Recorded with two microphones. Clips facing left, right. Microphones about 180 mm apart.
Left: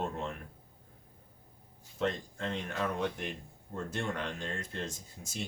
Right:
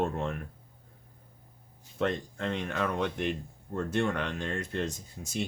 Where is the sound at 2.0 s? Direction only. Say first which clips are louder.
Right 3 dB; 65° right (ahead or behind).